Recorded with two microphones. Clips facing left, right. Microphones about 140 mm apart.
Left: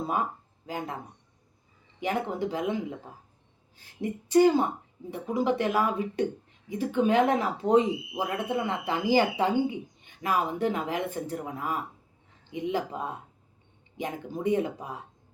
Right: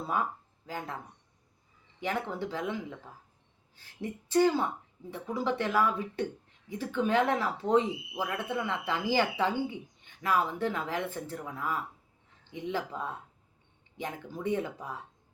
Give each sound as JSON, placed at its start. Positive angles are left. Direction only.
{"t": 0.0, "sound": "speech", "side_deg": 20}
{"t": 2.0, "sound": "speech", "side_deg": 15}